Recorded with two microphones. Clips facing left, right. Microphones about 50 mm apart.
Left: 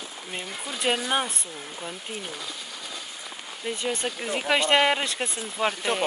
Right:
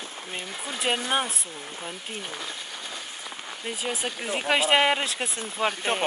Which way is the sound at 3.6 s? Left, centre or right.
Centre.